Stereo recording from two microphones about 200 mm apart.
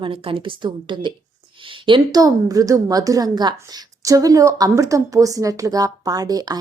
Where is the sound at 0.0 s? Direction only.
25° right (ahead or behind).